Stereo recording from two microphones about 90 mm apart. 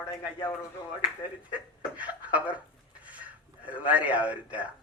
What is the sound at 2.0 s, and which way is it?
Speech, 15° right (ahead or behind).